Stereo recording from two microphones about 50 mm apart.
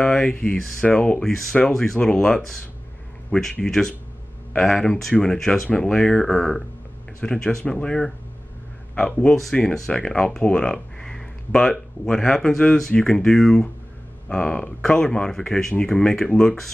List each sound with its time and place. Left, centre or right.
0.0 s speech: centre
2.0 s speech: centre
9.3 s speech: centre
9.8 s speech: centre